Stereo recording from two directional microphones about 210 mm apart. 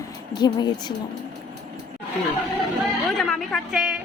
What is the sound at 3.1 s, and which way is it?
Speech, centre (ahead or behind).